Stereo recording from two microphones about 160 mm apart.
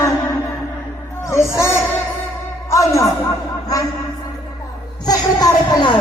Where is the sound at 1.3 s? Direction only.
15° left (ahead or behind).